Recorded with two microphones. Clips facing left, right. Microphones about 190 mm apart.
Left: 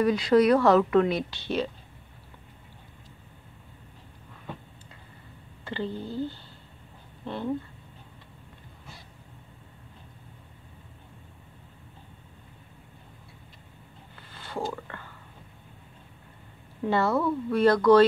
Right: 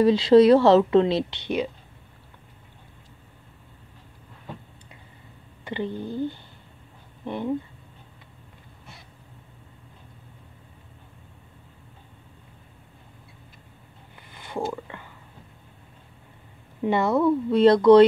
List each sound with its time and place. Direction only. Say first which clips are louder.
0.0 s a woman's voice: right 6 dB; 25° right (ahead or behind)
5.7 s speech: right 3 dB; 15° right (ahead or behind)
14.3 s a sound: right 3 dB; 15° right (ahead or behind)
16.8 s a woman's voice: right 4 dB; 20° right (ahead or behind)